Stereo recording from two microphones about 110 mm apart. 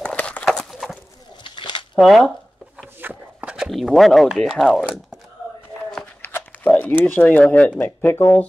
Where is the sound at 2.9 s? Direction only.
15° right (ahead or behind).